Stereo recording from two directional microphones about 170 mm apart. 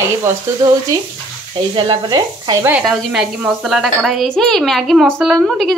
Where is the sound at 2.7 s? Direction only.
5° right (ahead or behind).